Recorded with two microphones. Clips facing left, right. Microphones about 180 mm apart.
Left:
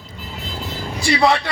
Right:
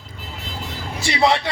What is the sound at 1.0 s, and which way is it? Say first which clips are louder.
Speech: left 2 dB; 25° right (ahead or behind).